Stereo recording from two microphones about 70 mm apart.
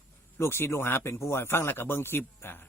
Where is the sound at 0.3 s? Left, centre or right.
Left.